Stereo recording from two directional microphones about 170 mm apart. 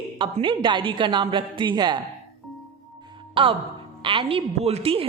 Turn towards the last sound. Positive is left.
turn(degrees=-35)  # may be behind; listen again after turning